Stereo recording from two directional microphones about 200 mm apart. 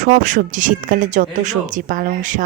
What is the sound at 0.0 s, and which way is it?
A woman's voice, 40° right (ahead or behind).